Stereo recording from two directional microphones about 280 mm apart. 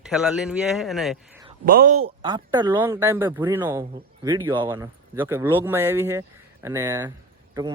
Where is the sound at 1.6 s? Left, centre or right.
Right.